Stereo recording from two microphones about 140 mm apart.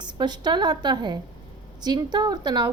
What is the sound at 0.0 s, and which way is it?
A woman's voice, 30° right (ahead or behind).